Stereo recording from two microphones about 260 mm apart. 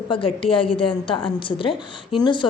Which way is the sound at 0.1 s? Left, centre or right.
Centre.